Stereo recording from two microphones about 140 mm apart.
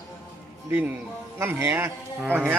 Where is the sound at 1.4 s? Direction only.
15° right (ahead or behind).